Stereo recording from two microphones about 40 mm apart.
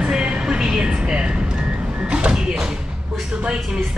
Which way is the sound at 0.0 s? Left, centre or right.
Right.